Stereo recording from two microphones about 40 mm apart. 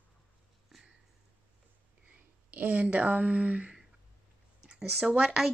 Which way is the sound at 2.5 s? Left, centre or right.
Right.